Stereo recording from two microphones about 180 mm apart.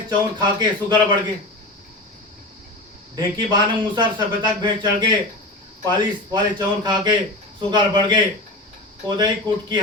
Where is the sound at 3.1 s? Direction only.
20° right (ahead or behind).